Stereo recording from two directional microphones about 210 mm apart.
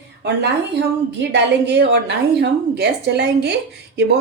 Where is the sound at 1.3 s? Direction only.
55° right (ahead or behind).